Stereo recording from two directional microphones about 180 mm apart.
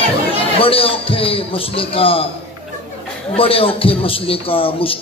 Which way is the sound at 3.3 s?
30° left (ahead or behind).